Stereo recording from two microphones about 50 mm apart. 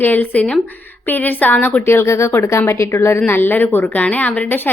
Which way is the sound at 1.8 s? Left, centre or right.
Left.